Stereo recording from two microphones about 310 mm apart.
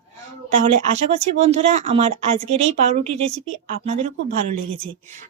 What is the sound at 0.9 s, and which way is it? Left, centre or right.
Speech, right.